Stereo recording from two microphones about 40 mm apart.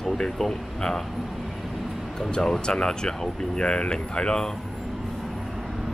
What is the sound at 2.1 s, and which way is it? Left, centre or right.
Speech, centre.